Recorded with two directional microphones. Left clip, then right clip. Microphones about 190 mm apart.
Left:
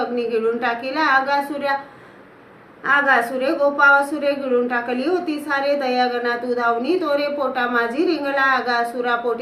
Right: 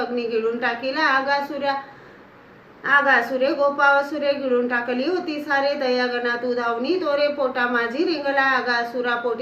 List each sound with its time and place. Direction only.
0.0 s a woman's voice: 20° left (ahead or behind)
2.8 s a woman's voice: 20° left (ahead or behind)